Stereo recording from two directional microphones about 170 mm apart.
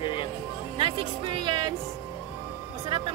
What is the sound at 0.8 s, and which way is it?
Music, 30° right (ahead or behind).